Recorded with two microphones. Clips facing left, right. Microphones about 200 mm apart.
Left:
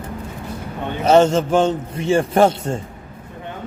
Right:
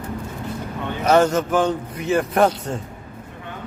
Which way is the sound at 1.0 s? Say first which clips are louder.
Left 3 dB; 25° left (ahead or behind).